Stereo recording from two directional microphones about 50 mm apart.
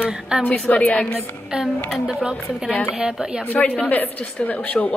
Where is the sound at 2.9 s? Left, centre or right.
Centre.